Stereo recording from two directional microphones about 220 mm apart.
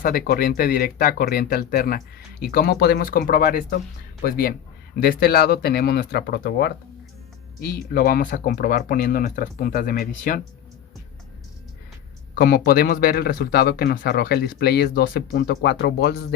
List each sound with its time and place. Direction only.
0.0 s speech: 40° left (ahead or behind)
12.3 s speech: 40° left (ahead or behind)